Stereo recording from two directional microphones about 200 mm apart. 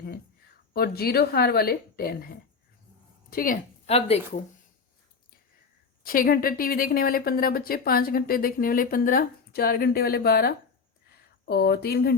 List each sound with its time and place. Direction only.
0.7 s a woman's voice: 50° left (ahead or behind); by 4.2 s 30° left (ahead or behind)
6.1 s speech: 45° left (ahead or behind)